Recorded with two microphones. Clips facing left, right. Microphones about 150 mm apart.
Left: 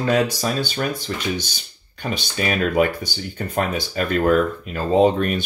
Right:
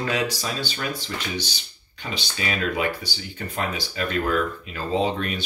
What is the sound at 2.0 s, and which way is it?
Speech, 50° left (ahead or behind).